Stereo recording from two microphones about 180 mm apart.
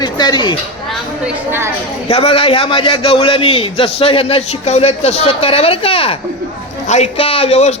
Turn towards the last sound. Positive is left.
turn(degrees=35)  # may be behind; listen again after turning